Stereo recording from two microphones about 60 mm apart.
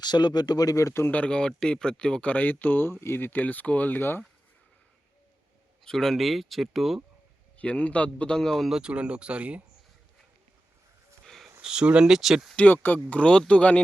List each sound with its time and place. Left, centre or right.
0.1 s a man's voice: left
1.1 s speech: centre
2.3 s speech: left
5.8 s speech: centre
7.6 s speech: left
8.4 s speech: centre
8.7 s speech: centre
11.6 s speech: centre
12.5 s speech: left